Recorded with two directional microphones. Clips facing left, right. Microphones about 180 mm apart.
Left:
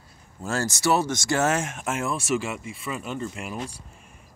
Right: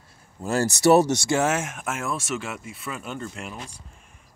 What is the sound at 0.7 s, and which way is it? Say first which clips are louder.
Speech: right 7 dB; 40° right (ahead or behind).